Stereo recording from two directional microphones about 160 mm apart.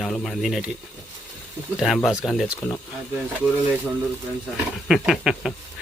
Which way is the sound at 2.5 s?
20° left (ahead or behind).